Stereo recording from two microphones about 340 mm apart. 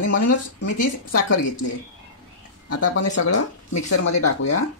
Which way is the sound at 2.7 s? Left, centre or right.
Left.